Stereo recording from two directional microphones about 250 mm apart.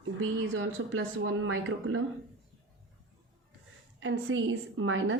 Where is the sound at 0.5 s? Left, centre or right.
Right.